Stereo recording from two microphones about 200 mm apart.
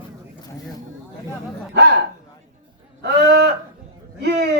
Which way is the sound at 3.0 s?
55° right (ahead or behind).